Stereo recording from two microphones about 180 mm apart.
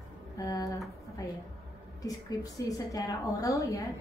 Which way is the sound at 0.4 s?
20° left (ahead or behind).